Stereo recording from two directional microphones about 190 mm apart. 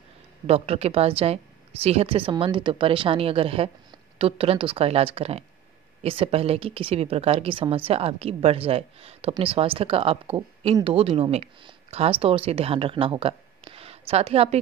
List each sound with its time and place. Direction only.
0.5 s a woman's voice: 35° right (ahead or behind)